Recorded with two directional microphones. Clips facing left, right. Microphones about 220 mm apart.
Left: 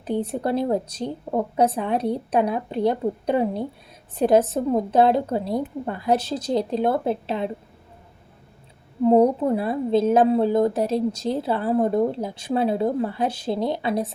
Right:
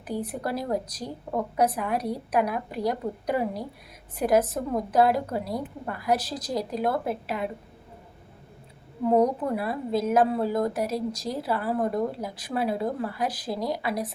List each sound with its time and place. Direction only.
0.0 s a woman's voice: 25° left (ahead or behind)
9.0 s a woman's voice: 30° left (ahead or behind)